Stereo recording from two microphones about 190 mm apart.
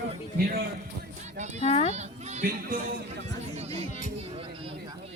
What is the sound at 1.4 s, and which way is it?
Speech, 40° right (ahead or behind).